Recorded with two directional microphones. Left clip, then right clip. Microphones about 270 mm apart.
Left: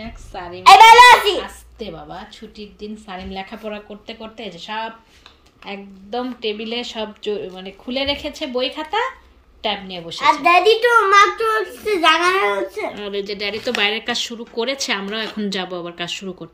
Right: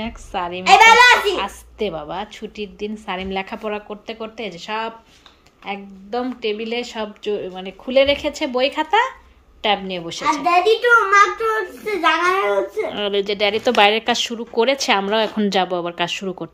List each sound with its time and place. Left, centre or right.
0.0 s a woman's voice: centre
10.6 s a woman's voice: left
12.9 s a woman's voice: centre